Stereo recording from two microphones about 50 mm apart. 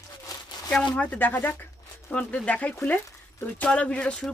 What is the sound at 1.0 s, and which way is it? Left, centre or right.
Speech, left.